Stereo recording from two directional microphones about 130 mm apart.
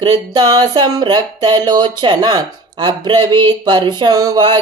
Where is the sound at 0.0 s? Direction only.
30° right (ahead or behind).